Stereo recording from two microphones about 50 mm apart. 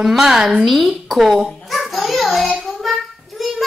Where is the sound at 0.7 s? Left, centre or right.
Centre.